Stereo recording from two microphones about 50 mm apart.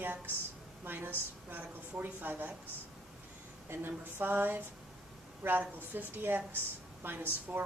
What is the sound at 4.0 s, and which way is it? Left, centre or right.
A woman's voice, right.